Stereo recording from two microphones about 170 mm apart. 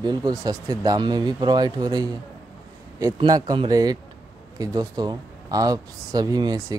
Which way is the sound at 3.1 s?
20° right (ahead or behind).